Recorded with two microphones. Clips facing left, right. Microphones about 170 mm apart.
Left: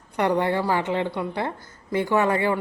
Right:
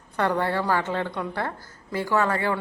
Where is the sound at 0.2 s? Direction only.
15° left (ahead or behind).